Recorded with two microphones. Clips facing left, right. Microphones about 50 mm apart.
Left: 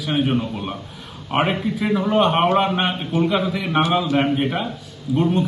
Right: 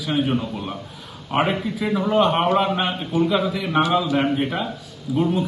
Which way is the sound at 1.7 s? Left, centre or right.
Centre.